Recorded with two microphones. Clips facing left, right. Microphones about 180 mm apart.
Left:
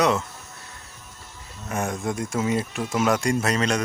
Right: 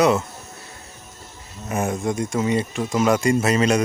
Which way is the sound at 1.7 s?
5° right (ahead or behind).